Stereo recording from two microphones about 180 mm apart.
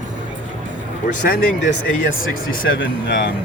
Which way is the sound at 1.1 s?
45° left (ahead or behind).